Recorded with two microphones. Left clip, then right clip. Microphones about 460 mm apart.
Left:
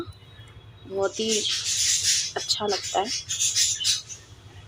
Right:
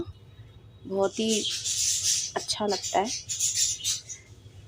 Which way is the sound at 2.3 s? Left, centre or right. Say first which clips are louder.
Left 3 dB; right.